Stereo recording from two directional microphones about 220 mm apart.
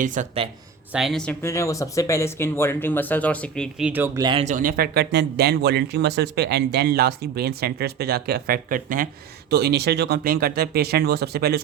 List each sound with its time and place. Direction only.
0.0 s speech: 35° right (ahead or behind)
0.9 s speech: centre (ahead or behind); by 4.4 s 20° right (ahead or behind)
4.4 s speech: 40° right (ahead or behind)